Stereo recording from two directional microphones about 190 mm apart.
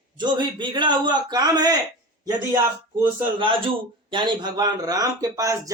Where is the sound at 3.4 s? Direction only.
25° right (ahead or behind).